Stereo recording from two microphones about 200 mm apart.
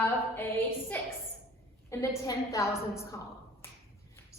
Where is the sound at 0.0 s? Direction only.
10° left (ahead or behind).